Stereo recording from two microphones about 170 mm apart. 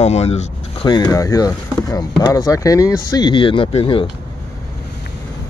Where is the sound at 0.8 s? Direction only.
25° left (ahead or behind).